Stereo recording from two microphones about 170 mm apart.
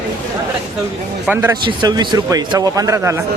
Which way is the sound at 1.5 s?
25° right (ahead or behind).